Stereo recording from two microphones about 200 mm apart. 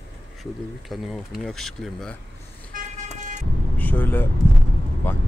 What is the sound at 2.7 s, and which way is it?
Vehicle, 35° right (ahead or behind).